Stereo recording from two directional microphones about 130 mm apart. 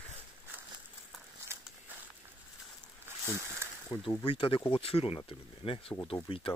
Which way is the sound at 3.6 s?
20° right (ahead or behind).